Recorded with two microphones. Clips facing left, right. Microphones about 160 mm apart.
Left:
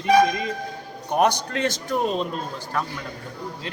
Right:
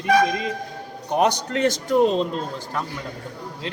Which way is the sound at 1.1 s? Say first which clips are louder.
Even; 20° right (ahead or behind).